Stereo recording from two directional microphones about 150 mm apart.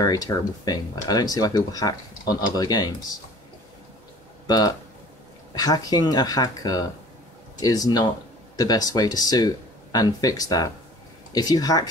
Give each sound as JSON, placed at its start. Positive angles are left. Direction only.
{"t": 0.0, "sound": "speech", "side_deg": 25}
{"t": 4.5, "sound": "speech", "side_deg": 25}